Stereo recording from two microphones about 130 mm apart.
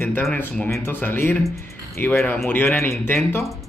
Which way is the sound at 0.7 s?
15° left (ahead or behind).